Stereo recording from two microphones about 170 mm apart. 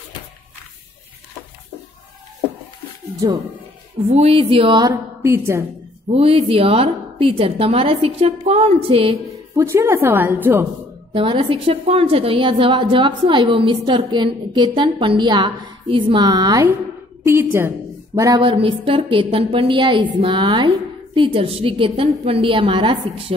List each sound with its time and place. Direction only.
3.2 s a woman's voice: 25° right (ahead or behind)
4.1 s a woman's voice: 35° right (ahead or behind)
5.2 s a woman's voice: 15° right (ahead or behind)
6.5 s a woman's voice: 35° right (ahead or behind)
9.6 s a woman's voice: 15° right (ahead or behind)
11.1 s a woman's voice: 30° right (ahead or behind)